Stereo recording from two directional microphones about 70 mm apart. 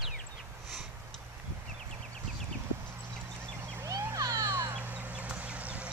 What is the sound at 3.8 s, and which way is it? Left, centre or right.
Vehicle, right.